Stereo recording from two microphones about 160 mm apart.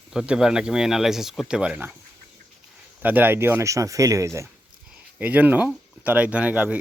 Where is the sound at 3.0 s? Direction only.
10° right (ahead or behind).